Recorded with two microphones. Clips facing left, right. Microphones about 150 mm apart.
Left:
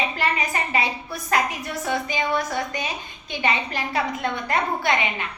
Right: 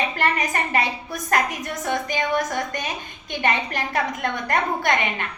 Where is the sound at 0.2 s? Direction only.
50° right (ahead or behind).